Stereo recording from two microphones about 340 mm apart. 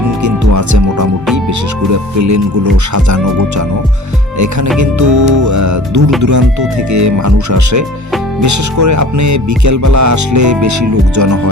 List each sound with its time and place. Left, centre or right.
0.2 s music: right